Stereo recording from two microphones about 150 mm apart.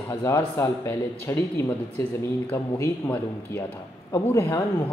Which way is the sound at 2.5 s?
15° left (ahead or behind).